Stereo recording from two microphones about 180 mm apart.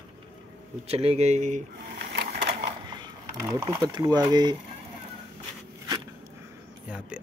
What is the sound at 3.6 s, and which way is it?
Speech, 20° right (ahead or behind).